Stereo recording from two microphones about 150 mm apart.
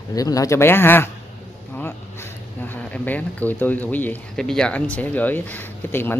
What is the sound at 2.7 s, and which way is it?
Speech, 10° left (ahead or behind).